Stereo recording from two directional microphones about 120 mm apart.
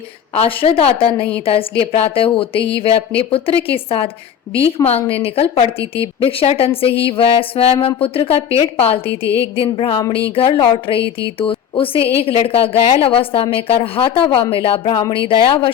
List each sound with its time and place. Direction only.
0.4 s a woman's voice: 50° left (ahead or behind)